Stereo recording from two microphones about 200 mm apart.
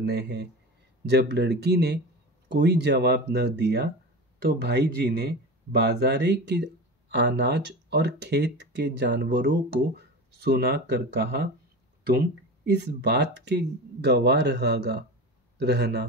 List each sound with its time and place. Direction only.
0.0 s speech: 55° right (ahead or behind)
12.7 s a man's voice: 55° right (ahead or behind)